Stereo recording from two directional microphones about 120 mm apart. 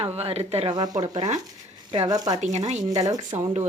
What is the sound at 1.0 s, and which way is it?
Speech, 80° right.